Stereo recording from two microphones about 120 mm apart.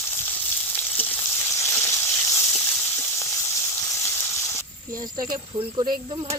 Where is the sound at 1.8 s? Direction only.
20° left (ahead or behind).